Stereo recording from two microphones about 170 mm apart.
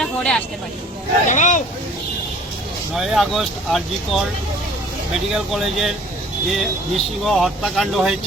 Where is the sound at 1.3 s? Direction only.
45° left (ahead or behind).